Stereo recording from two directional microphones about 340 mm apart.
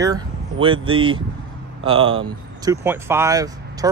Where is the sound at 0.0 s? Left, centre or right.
Centre.